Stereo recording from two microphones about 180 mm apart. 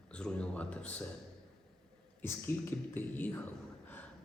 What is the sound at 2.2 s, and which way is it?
A man's voice, 15° left (ahead or behind).